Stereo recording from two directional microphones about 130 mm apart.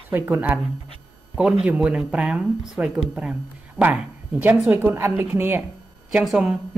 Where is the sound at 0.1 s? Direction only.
15° right (ahead or behind).